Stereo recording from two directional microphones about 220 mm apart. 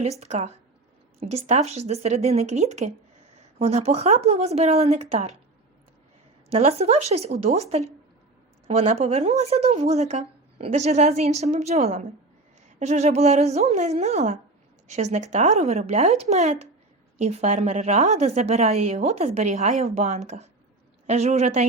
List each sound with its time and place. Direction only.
0.0 s a woman's voice: 30° right (ahead or behind)
6.5 s a woman's voice: 30° right (ahead or behind)